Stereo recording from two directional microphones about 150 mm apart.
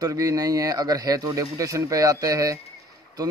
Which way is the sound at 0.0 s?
25° right (ahead or behind).